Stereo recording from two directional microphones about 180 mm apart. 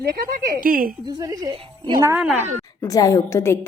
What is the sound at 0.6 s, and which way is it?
Speech, 50° right (ahead or behind).